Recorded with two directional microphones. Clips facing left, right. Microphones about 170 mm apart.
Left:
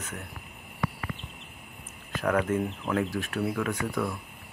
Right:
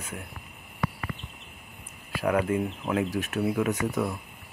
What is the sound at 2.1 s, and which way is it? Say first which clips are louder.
Speech: right 1 dB; 10° right (ahead or behind).